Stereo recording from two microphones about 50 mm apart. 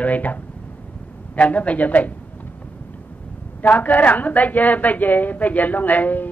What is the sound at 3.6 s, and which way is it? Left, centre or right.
A woman's voice, left.